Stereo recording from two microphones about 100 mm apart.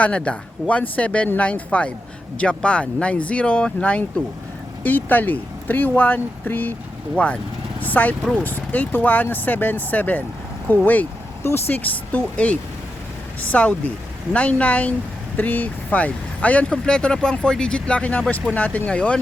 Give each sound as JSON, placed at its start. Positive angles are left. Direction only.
{"t": 0.0, "sound": "speech", "side_deg": 10}